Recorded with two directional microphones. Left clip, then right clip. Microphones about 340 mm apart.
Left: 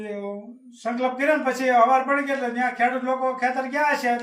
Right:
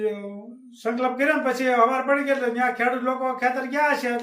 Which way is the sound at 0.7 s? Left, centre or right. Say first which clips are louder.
Right 1 dB; centre.